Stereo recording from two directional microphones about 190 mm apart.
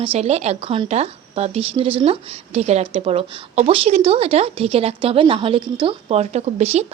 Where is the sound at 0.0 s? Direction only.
30° right (ahead or behind).